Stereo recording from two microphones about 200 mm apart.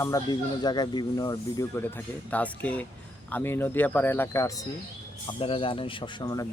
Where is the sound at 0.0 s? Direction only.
20° left (ahead or behind).